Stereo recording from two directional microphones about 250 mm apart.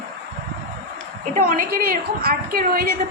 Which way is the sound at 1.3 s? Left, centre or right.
Right.